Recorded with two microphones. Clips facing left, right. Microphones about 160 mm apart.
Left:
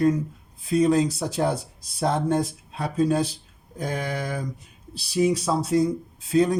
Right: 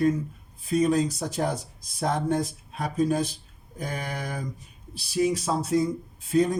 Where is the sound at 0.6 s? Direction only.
85° left.